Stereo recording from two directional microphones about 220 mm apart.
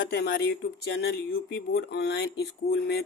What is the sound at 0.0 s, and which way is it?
Speech, 50° left (ahead or behind).